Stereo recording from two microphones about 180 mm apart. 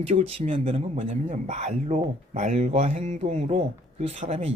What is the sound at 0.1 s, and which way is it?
Speech, 35° right (ahead or behind).